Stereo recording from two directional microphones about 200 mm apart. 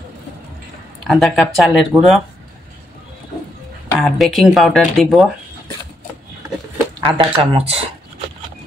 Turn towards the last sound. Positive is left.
turn(degrees=-30)  # may be behind; listen again after turning